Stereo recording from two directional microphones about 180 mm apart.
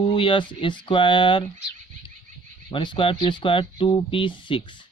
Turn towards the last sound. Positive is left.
turn(degrees=25)  # may be behind; listen again after turning